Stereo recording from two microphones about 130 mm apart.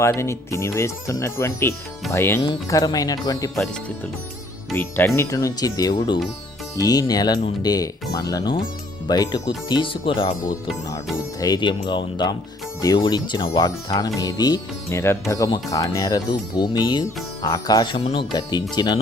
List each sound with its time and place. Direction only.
0.0 s speech: 20° left (ahead or behind)
2.4 s speech: 30° left (ahead or behind)
3.5 s speech: centre (ahead or behind)
4.7 s speech: 15° left (ahead or behind); by 10.3 s 40° left (ahead or behind)
11.3 s speech: 30° left (ahead or behind)